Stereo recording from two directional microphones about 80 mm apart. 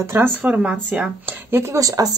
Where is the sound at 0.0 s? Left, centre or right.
Right.